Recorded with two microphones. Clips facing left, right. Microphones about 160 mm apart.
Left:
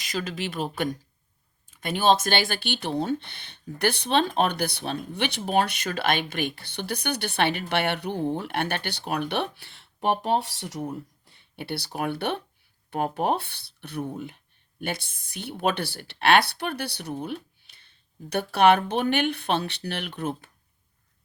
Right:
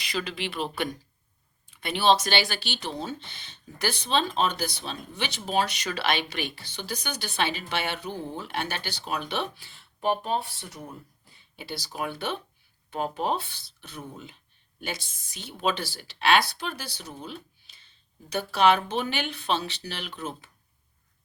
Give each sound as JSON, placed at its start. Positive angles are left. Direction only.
{"t": 0.0, "sound": "speech", "side_deg": 45}
{"t": 10.8, "sound": "speech", "side_deg": 65}